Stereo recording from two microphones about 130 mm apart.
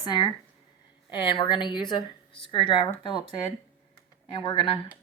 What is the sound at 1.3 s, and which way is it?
A woman's voice, 40° left (ahead or behind).